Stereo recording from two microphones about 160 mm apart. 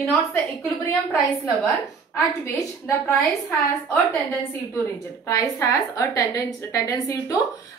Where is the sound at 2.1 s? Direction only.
15° left (ahead or behind).